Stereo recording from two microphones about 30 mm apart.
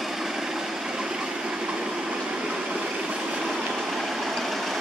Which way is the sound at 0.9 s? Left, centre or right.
Right.